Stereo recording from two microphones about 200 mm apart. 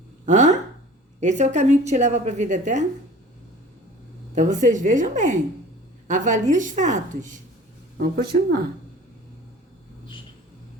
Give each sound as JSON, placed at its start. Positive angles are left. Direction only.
{"t": 0.3, "sound": "a woman's voice", "side_deg": -35}
{"t": 4.4, "sound": "a woman's voice", "side_deg": -40}
{"t": 8.1, "sound": "speech", "side_deg": -50}